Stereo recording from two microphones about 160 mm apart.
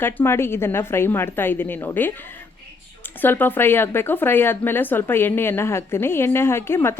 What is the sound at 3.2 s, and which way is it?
Speech, 10° left (ahead or behind).